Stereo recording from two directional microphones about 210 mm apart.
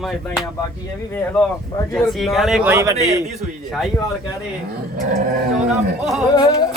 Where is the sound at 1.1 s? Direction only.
10° left (ahead or behind); by 3.1 s 15° right (ahead or behind).